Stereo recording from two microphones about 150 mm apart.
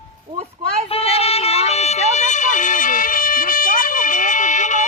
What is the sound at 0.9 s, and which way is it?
Music, 40° left (ahead or behind).